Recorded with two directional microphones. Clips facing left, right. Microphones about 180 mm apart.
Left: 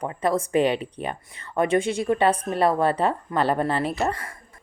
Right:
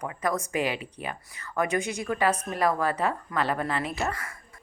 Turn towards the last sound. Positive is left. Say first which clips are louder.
# left 5 dB
turn(degrees=30)  # may be behind; listen again after turning